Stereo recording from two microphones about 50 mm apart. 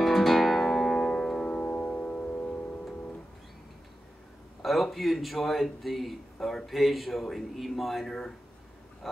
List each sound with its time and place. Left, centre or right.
0.0 s music: centre
1.4 s music: left
4.6 s a man's voice: centre